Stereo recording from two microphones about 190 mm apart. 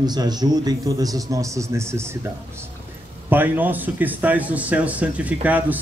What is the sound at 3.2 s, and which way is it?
A man's voice, 10° right (ahead or behind).